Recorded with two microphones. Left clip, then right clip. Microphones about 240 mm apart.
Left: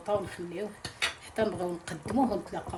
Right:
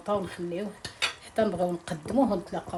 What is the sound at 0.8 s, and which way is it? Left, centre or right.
Cutlery, centre.